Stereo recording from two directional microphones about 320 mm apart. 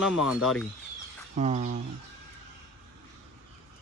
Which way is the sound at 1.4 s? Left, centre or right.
Right.